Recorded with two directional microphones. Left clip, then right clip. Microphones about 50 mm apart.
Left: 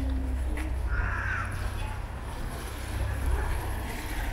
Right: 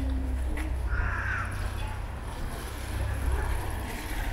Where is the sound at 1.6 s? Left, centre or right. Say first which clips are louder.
Even; centre.